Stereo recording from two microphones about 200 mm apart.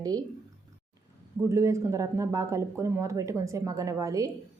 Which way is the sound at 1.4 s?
15° right (ahead or behind).